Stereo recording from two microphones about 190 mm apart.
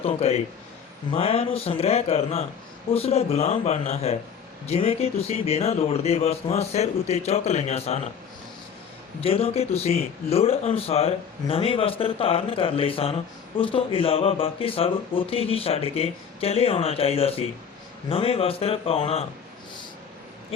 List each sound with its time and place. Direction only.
0.0 s speech: 35° left (ahead or behind)
9.2 s speech: 30° left (ahead or behind)
20.5 s speech: 30° left (ahead or behind)